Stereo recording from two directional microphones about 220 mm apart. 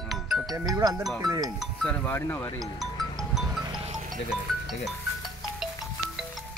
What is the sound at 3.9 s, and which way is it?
Music, 30° right (ahead or behind).